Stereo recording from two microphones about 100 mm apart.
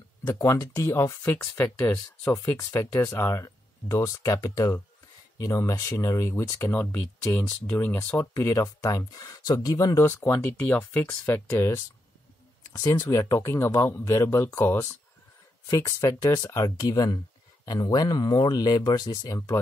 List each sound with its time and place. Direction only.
0.3 s speech: 30° left (ahead or behind)
8.4 s speech: 30° left (ahead or behind)